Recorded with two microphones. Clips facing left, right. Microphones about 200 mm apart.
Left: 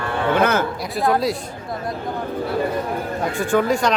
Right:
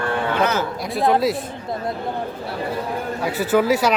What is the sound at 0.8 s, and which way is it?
Speech, centre (ahead or behind).